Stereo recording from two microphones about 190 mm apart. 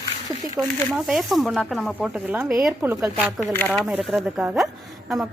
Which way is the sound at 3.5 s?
10° left (ahead or behind).